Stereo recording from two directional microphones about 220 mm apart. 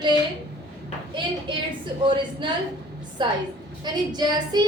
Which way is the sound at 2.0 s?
20° right (ahead or behind).